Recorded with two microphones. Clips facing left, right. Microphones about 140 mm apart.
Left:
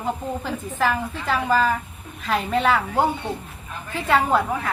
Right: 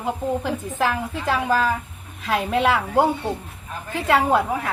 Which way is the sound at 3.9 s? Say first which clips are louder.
Right 1 dB; 15° right (ahead or behind).